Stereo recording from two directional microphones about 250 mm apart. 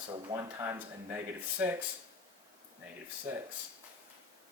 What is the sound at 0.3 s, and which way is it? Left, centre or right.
Speech, centre.